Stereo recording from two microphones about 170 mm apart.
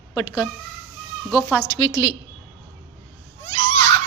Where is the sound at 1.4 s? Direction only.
15° left (ahead or behind).